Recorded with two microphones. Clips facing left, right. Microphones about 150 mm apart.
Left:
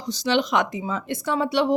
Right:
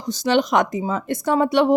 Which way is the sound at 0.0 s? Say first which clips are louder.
Right 3 dB; 50° right (ahead or behind).